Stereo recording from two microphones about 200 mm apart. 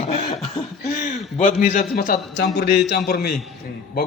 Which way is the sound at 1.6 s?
40° left (ahead or behind).